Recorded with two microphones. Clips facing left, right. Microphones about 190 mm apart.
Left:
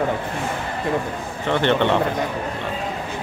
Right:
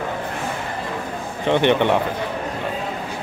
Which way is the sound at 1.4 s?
15° right (ahead or behind).